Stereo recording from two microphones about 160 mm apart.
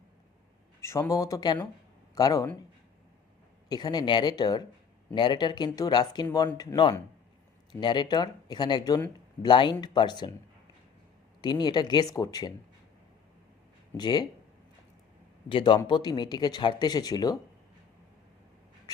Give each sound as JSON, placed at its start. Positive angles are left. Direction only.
{"t": 0.8, "sound": "speech", "side_deg": 20}
{"t": 3.7, "sound": "speech", "side_deg": 25}
{"t": 11.3, "sound": "speech", "side_deg": 25}
{"t": 13.9, "sound": "speech", "side_deg": 25}
{"t": 15.4, "sound": "a man's voice", "side_deg": 30}